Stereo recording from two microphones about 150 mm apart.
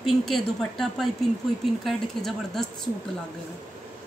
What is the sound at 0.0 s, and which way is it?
A woman's voice, 5° left (ahead or behind).